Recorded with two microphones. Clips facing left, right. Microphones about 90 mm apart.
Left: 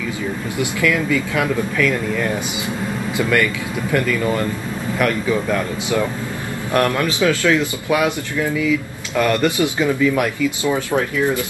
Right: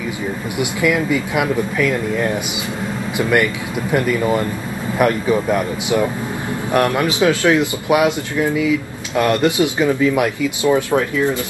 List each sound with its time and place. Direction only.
0.6 s speech: 20° right (ahead or behind)